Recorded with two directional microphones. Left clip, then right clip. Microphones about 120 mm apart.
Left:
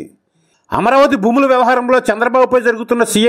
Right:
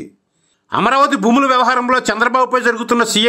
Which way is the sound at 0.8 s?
40° left (ahead or behind).